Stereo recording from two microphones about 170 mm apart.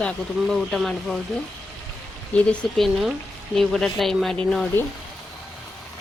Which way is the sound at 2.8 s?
Centre (ahead or behind).